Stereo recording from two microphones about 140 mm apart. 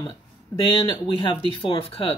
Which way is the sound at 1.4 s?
40° left (ahead or behind).